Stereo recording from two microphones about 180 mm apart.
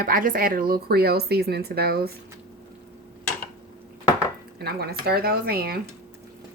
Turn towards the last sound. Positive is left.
turn(degrees=-60)  # may be behind; listen again after turning